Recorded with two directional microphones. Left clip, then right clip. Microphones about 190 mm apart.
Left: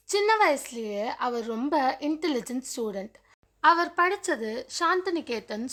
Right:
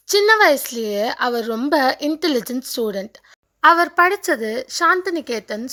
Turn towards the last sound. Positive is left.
turn(degrees=-20)  # may be behind; listen again after turning